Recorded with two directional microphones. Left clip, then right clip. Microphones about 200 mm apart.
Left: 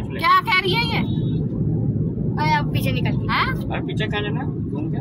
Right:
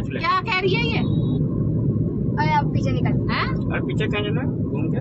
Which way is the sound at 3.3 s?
35° left (ahead or behind).